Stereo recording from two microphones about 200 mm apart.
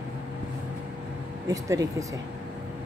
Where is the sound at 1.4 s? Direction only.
15° right (ahead or behind).